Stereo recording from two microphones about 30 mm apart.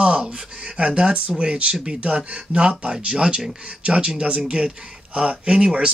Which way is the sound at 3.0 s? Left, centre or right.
Right.